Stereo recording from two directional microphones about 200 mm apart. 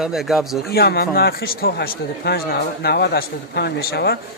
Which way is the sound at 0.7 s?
50° left (ahead or behind).